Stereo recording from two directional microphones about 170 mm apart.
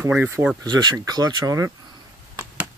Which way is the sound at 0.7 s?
25° right (ahead or behind).